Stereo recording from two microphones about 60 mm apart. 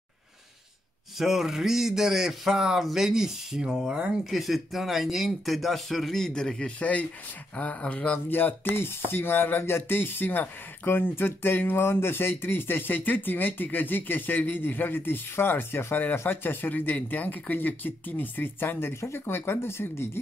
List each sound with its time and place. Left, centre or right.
1.1 s speech: centre; by 8.2 s left
8.3 s speech: left